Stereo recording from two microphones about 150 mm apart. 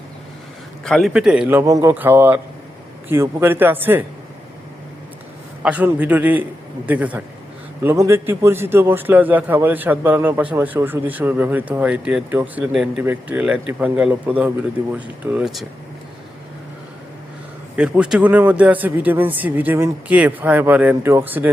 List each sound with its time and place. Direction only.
0.9 s a man's voice: centre (ahead or behind); by 4.0 s 15° right (ahead or behind)
5.6 s a man's voice: 10° right (ahead or behind)
17.7 s a man's voice: 5° right (ahead or behind)